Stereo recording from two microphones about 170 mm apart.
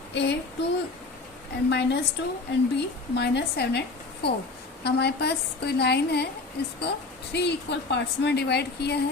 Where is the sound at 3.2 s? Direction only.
75° left (ahead or behind).